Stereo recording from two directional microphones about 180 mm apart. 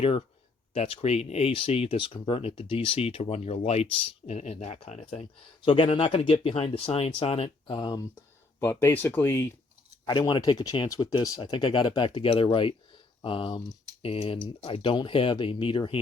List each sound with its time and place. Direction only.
0.7 s speech: 35° left (ahead or behind); by 9.5 s 15° left (ahead or behind)
10.1 s speech: 25° left (ahead or behind)